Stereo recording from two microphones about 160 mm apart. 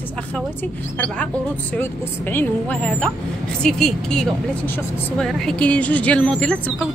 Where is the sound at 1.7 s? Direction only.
15° left (ahead or behind).